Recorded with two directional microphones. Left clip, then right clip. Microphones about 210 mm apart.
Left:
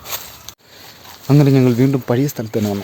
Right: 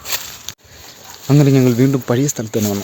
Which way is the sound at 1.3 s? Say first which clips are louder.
Even; centre (ahead or behind).